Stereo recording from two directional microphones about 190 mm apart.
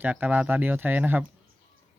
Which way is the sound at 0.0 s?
10° right (ahead or behind).